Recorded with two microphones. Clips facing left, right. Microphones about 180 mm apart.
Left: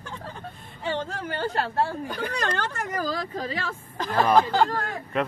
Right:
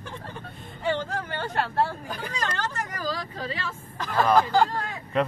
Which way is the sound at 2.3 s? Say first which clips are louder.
Even; 55° left (ahead or behind).